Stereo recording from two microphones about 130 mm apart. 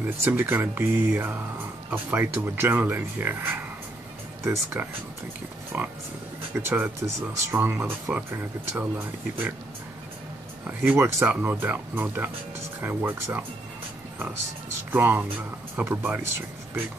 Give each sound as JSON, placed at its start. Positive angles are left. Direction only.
{"t": 0.2, "sound": "speech", "side_deg": -15}
{"t": 10.7, "sound": "speech", "side_deg": -15}
{"t": 14.9, "sound": "speech", "side_deg": -15}